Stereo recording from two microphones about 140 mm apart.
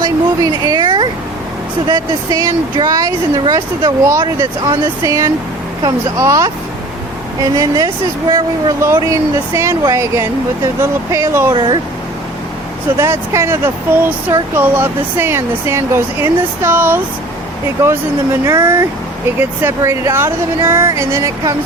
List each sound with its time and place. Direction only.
0.0 s speech: 30° right (ahead or behind)
7.5 s speech: 25° right (ahead or behind)
11.5 s speech: 35° right (ahead or behind)
13.0 s speech: 20° right (ahead or behind)
18.4 s speech: 25° right (ahead or behind)